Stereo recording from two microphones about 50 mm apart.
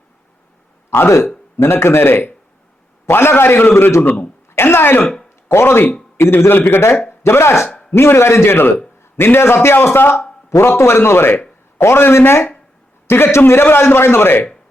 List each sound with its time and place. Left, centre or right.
0.9 s a man's voice: left
4.5 s throat clearing: left
5.5 s a man's voice: left
7.7 s a sound: left
8.0 s a man's voice: left